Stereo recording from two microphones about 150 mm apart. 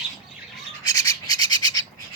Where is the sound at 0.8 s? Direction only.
25° left (ahead or behind).